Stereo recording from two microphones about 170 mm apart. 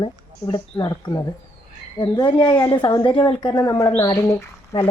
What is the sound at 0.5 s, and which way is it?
A woman's voice, 20° left (ahead or behind).